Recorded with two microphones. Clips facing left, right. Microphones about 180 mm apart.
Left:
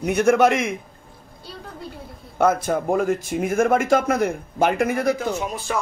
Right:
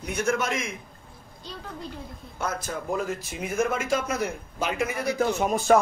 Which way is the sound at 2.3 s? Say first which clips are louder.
Left 12 dB; 60° left (ahead or behind).